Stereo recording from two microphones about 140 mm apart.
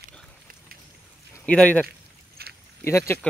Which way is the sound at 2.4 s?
90° right.